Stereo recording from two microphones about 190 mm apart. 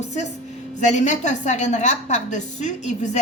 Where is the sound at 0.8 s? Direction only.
40° left (ahead or behind).